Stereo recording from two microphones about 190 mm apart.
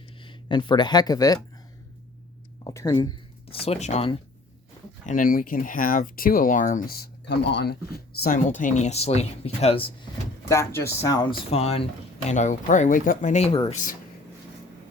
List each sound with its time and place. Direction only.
0.3 s speech: 25° left (ahead or behind)
2.6 s speech: 20° left (ahead or behind)
5.0 s speech: 45° left (ahead or behind)
10.5 s speech: 15° left (ahead or behind); by 13.6 s 35° left (ahead or behind)